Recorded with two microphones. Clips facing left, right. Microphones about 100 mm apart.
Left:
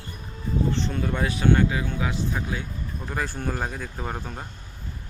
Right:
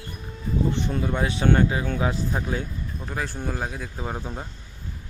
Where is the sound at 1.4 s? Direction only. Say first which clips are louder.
Even; 35° right (ahead or behind).